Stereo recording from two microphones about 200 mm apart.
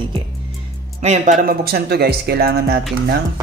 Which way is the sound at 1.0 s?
35° right (ahead or behind).